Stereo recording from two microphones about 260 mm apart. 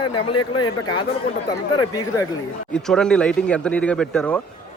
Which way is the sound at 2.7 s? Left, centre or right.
Centre.